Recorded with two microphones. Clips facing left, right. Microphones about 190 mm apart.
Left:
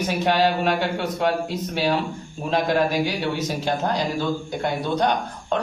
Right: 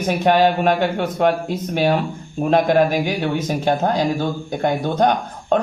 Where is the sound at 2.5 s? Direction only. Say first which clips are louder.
Right 5 dB; 50° right (ahead or behind).